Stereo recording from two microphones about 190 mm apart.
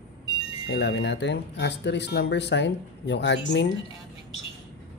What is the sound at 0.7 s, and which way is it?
Speech, 70° left (ahead or behind).